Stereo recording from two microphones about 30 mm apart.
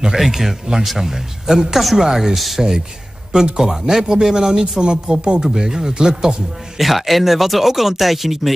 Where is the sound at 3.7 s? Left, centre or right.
Centre.